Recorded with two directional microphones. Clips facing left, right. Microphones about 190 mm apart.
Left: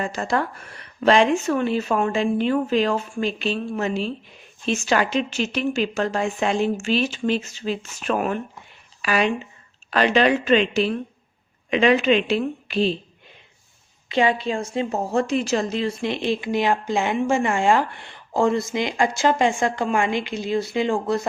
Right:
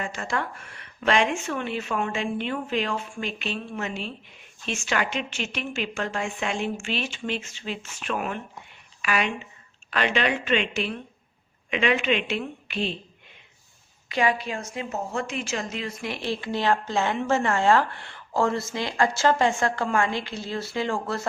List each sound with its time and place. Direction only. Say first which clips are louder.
0.0 s speech: left 6 dB; 35° left (ahead or behind)
14.1 s speech: left 4 dB; 25° left (ahead or behind)